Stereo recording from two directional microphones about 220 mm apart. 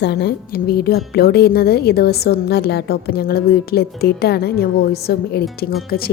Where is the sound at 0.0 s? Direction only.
50° left (ahead or behind).